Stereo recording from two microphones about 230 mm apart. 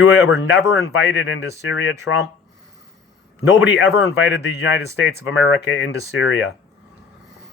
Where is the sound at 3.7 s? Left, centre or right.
Left.